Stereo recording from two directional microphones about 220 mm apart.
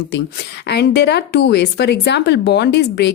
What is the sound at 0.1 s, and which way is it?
A woman's voice, 50° left (ahead or behind).